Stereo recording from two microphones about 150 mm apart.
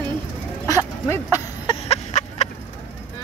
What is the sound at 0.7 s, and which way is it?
Dog, 20° left (ahead or behind).